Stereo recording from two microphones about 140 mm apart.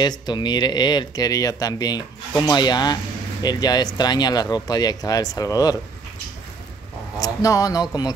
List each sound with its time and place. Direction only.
0.0 s speech: 30° left (ahead or behind)
7.2 s speech: 25° left (ahead or behind)